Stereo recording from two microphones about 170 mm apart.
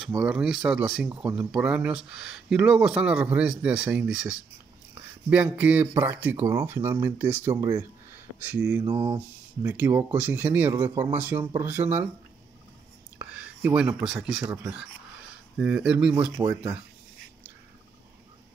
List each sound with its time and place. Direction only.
0.2 s speech: 5° right (ahead or behind)
8.8 s mantra: 30° right (ahead or behind)
9.6 s speech: 10° right (ahead or behind)
13.2 s speech: 10° right (ahead or behind)